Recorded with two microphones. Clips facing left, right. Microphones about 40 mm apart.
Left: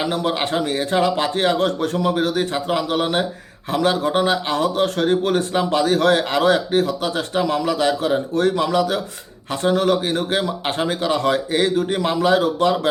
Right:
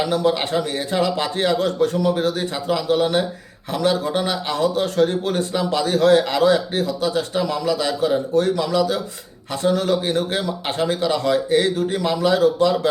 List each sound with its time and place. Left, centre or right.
0.0 s a man's voice: left